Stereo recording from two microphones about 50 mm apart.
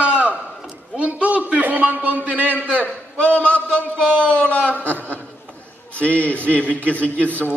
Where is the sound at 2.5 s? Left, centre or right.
Left.